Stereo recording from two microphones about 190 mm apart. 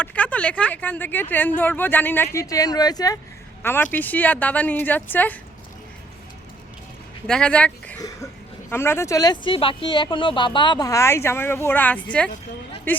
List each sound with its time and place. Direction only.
0.0 s speech: 5° left (ahead or behind)
7.3 s a woman's voice: 5° left (ahead or behind)